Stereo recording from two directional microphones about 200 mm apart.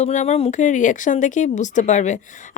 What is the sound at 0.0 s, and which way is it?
Speech, 35° left (ahead or behind).